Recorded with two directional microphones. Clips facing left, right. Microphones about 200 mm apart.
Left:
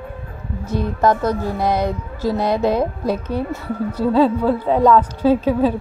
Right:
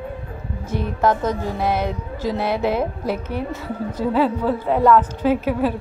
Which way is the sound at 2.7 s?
15° left (ahead or behind).